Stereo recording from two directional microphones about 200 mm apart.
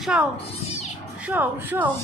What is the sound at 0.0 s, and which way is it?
Speech, 5° right (ahead or behind).